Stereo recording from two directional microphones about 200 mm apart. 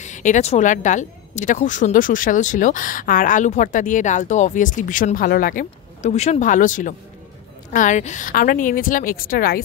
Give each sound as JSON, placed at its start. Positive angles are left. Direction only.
{"t": 0.0, "sound": "a woman's voice", "side_deg": 35}